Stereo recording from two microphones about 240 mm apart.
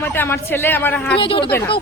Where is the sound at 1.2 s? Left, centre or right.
Left.